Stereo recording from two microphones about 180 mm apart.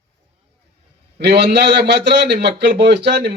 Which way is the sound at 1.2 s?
70° right (ahead or behind).